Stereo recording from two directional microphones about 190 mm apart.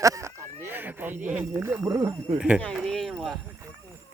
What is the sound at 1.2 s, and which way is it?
Speech, 5° right (ahead or behind).